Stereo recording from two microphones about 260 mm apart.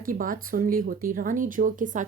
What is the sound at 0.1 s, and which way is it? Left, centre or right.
Speech, right.